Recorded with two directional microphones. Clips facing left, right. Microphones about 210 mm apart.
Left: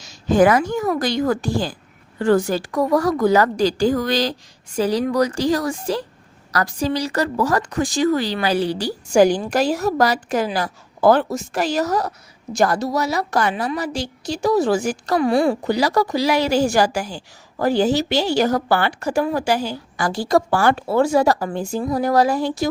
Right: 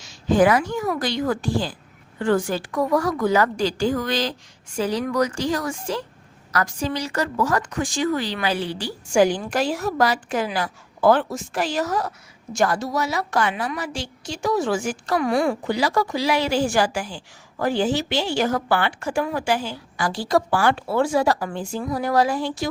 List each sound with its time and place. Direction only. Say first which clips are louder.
0.0 s a woman's voice: left 2 dB; 40° left (ahead or behind)